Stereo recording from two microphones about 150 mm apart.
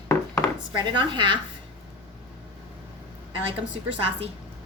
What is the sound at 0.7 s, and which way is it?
Speech, 30° right (ahead or behind).